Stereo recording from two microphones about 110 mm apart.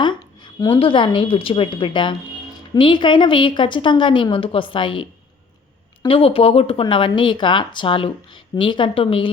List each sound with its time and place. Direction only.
0.0 s a woman's voice: 45° left (ahead or behind)
6.1 s a woman's voice: 55° left (ahead or behind)